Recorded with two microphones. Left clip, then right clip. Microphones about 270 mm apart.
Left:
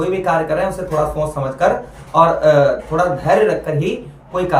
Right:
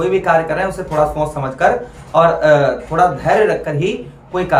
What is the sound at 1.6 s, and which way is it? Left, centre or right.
Speech, centre.